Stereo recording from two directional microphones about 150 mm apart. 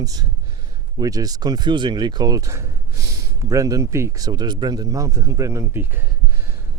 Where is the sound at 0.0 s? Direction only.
25° right (ahead or behind).